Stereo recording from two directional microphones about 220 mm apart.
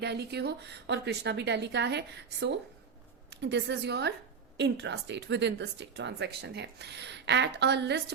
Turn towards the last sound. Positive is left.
turn(degrees=-50)  # may be behind; listen again after turning